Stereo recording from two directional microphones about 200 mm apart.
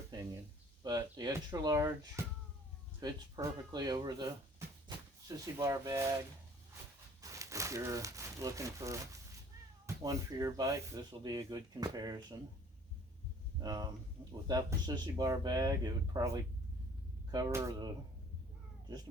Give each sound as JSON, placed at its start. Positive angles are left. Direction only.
{"t": 0.1, "sound": "a sound", "side_deg": -20}
{"t": 0.8, "sound": "speech", "side_deg": -20}
{"t": 5.5, "sound": "speech", "side_deg": -15}
{"t": 7.2, "sound": "speech", "side_deg": -15}
{"t": 13.6, "sound": "speech", "side_deg": -20}